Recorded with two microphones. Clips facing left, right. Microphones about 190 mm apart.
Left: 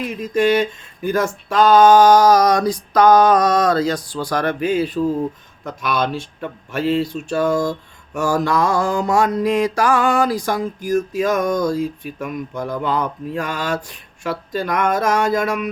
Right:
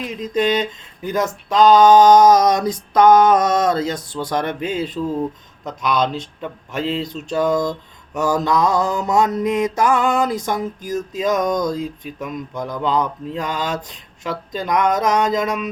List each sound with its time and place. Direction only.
0.1 s mantra: 20° right (ahead or behind)